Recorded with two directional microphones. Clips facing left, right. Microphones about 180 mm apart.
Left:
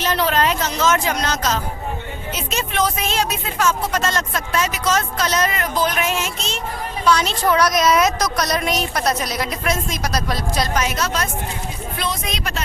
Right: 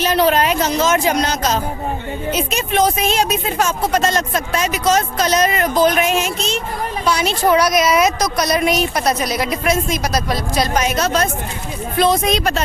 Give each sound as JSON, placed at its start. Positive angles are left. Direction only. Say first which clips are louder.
{"t": 0.0, "sound": "a woman's voice", "louder": "right 4 dB", "side_deg": -15}
{"t": 10.8, "sound": "a woman's voice", "louder": "right 5 dB", "side_deg": -25}